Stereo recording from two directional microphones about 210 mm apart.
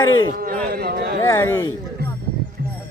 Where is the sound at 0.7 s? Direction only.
45° right (ahead or behind).